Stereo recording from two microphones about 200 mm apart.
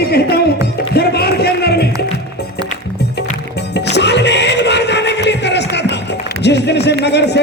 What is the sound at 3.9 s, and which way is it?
Music, 60° left (ahead or behind).